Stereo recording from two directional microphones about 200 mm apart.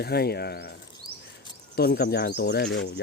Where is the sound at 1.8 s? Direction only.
50° left (ahead or behind).